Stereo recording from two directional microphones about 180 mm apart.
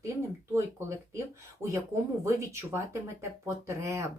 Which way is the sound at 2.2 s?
15° right (ahead or behind).